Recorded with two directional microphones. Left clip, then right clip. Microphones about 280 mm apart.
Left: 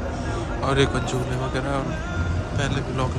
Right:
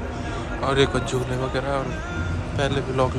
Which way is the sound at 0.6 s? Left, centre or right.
Centre.